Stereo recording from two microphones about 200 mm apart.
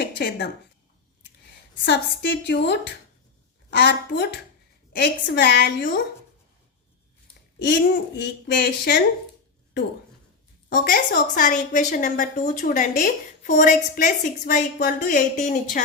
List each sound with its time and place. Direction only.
0.2 s a woman's voice: 55° left (ahead or behind)
1.8 s speech: 60° left (ahead or behind)
7.6 s speech: 60° left (ahead or behind)
10.9 s a woman's voice: 45° left (ahead or behind)